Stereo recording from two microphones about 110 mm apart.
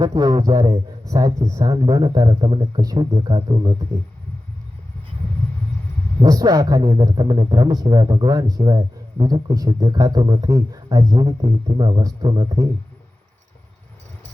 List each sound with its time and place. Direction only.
0.0 s a man's voice: 35° right (ahead or behind)
3.3 s a man's voice: 50° right (ahead or behind)
6.2 s a man's voice: 30° right (ahead or behind)